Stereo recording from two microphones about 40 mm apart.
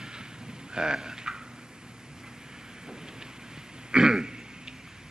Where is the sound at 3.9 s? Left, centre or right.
Centre.